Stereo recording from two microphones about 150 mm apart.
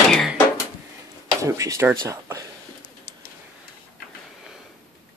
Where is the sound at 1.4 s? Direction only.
20° right (ahead or behind).